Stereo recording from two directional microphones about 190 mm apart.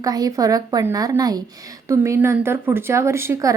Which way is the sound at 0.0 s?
20° right (ahead or behind).